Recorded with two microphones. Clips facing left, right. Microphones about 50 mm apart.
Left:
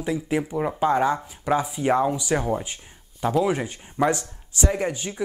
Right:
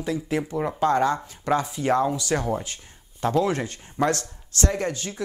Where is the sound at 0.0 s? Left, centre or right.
Centre.